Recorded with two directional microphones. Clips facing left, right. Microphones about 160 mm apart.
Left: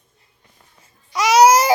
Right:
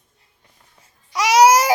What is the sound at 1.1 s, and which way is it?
Baby cry, 15° right (ahead or behind).